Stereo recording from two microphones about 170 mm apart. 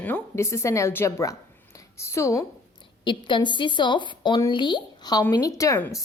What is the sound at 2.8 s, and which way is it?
A woman's voice, 30° left (ahead or behind).